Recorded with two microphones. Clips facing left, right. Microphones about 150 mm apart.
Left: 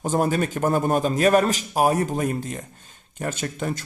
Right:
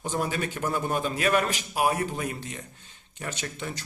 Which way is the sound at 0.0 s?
45° left (ahead or behind).